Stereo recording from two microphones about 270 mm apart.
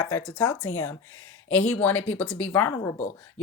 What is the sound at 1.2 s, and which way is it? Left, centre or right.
Speech, left.